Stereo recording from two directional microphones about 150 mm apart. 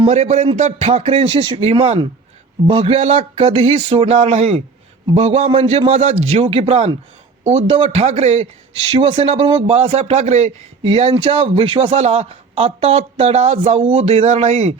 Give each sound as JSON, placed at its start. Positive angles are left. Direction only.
{"t": 0.0, "sound": "a man's voice", "side_deg": -45}